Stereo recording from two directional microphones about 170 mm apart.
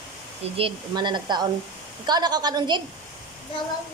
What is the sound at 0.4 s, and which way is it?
Speech, 30° right (ahead or behind).